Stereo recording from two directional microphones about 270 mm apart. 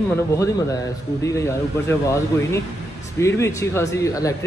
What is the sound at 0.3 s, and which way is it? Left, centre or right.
Speech, centre.